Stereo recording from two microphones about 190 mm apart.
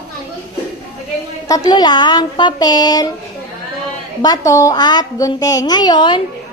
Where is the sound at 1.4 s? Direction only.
20° left (ahead or behind).